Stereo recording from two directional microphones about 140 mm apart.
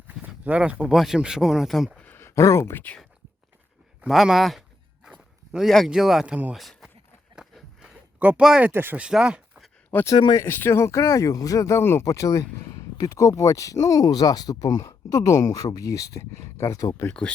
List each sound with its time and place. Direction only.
0.1 s speech: 10° right (ahead or behind)
2.0 s speech: 15° left (ahead or behind)
4.0 s speech: 5° right (ahead or behind)
7.3 s a sound: 5° right (ahead or behind)
10.2 s speech: 30° left (ahead or behind)
10.4 s speech: 15° left (ahead or behind)